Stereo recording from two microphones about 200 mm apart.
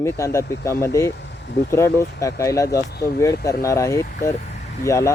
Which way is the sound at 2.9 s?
50° left (ahead or behind).